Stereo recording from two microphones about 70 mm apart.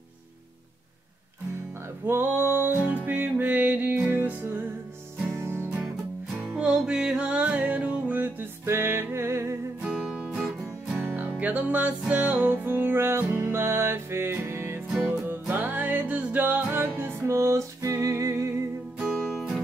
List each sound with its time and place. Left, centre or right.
2.0 s music: right
6.3 s music: centre; by 9.6 s right
9.8 s music: centre
11.0 s music: right
17.2 s music: right
19.2 s music: centre